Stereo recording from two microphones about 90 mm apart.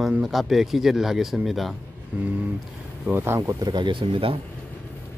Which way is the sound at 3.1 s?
25° right (ahead or behind).